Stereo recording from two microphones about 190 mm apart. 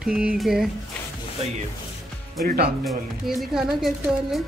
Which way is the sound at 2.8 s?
Centre (ahead or behind).